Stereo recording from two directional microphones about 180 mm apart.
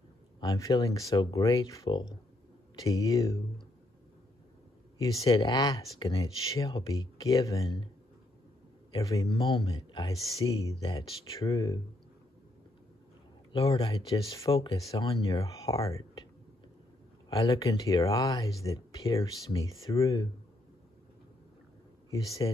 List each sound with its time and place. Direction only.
0.4 s speech: 20° left (ahead or behind)
4.9 s speech: 20° left (ahead or behind)
8.9 s speech: 20° left (ahead or behind)
10.1 s speech: centre (ahead or behind)
10.8 s speech: 20° left (ahead or behind)
13.5 s speech: 25° left (ahead or behind)
15.5 s speech: 20° left (ahead or behind)
17.3 s speech: 20° left (ahead or behind)
22.4 s speech: 25° left (ahead or behind)